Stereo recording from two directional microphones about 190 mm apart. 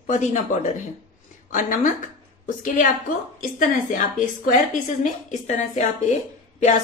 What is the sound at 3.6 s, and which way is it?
A woman's voice, 40° left (ahead or behind).